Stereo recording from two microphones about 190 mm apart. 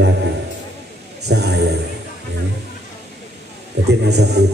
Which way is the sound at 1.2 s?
60° right (ahead or behind).